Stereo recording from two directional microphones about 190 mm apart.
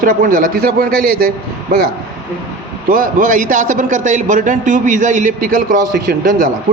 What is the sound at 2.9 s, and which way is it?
A man's voice, 45° right (ahead or behind).